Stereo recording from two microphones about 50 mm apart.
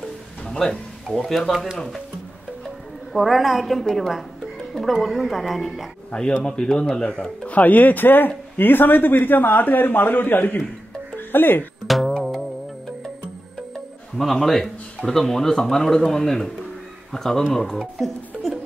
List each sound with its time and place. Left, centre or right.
0.5 s speech: centre
1.2 s speech: centre
2.6 s music: centre
3.9 s speech: centre
6.4 s a man's voice: centre; by 10.6 s left
11.1 s music: left
11.9 s music: centre
14.1 s speech: centre